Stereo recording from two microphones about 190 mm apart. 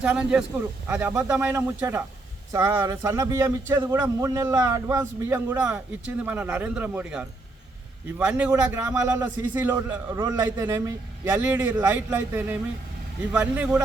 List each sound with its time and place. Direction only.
0.0 s a man's voice: 5° right (ahead or behind)